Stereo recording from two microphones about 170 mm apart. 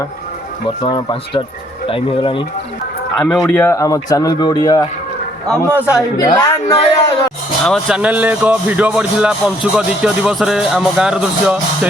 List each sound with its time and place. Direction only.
0.8 s speech: 25° left (ahead or behind)
3.2 s speech: centre (ahead or behind)
3.5 s speech: 15° left (ahead or behind)
5.7 s speech: 10° right (ahead or behind)
6.1 s speech: 20° left (ahead or behind)
7.6 s speech: centre (ahead or behind)